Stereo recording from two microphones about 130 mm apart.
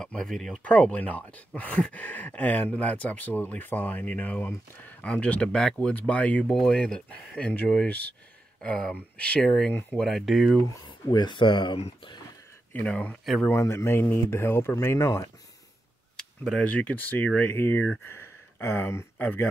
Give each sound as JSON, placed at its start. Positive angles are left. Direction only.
{"t": 0.0, "sound": "speech", "side_deg": 5}
{"t": 10.0, "sound": "speech", "side_deg": 0}
{"t": 10.7, "sound": "speech", "side_deg": 35}
{"t": 12.7, "sound": "speech", "side_deg": 10}
{"t": 13.2, "sound": "speech", "side_deg": 0}
{"t": 13.5, "sound": "speech", "side_deg": 20}
{"t": 16.2, "sound": "speech", "side_deg": 5}